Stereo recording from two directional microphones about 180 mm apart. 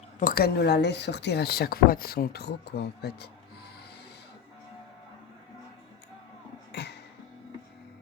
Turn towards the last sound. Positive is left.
turn(degrees=70)  # may be behind; listen again after turning